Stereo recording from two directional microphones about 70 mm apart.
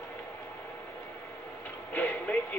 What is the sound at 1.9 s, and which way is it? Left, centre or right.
Music, left.